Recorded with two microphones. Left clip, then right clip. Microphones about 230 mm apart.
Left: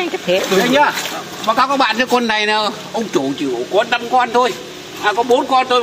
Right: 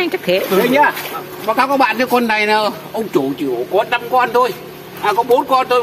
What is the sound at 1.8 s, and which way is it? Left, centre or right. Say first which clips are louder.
Speech: right 1 dB; centre.